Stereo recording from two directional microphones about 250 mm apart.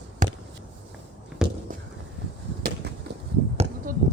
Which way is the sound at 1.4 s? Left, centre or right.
Centre.